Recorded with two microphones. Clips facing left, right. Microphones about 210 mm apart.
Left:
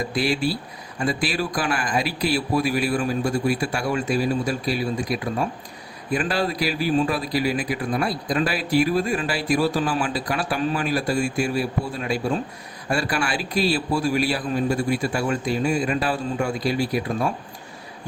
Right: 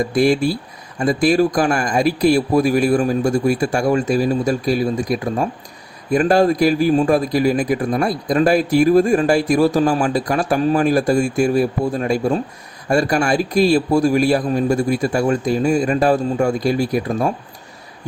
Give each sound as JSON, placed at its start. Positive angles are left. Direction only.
{"t": 0.1, "sound": "a man's voice", "side_deg": -50}